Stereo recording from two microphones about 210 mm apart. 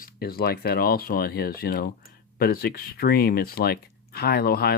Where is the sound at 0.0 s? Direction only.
45° left (ahead or behind).